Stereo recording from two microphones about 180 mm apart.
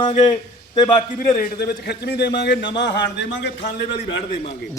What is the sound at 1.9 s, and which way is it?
A man's voice, 65° left (ahead or behind).